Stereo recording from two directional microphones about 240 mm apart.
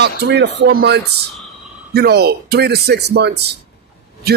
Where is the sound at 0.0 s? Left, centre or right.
Right.